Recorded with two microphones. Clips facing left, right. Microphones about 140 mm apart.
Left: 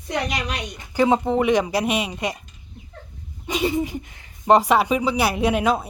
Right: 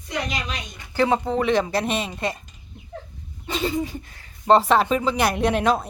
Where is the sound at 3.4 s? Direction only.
15° left (ahead or behind).